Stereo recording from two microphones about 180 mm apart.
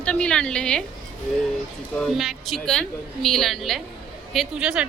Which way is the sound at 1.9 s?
Centre (ahead or behind).